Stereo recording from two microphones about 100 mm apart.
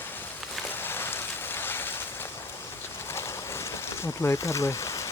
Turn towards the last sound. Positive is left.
turn(degrees=30)  # may be behind; listen again after turning